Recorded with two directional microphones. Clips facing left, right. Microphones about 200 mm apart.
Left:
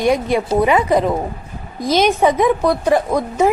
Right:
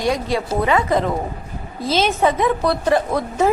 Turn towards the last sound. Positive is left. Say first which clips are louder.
# left 2 dB
turn(degrees=15)  # may be behind; listen again after turning